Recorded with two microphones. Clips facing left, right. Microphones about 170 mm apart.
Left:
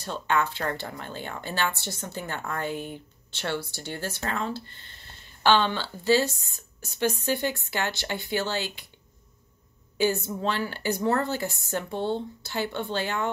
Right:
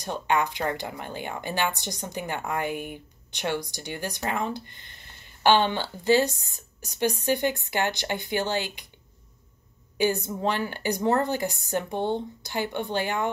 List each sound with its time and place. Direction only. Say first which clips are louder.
0.0 s a woman's voice: right 1 dB; 15° right (ahead or behind)
10.2 s a woman's voice: right 1 dB; 15° right (ahead or behind)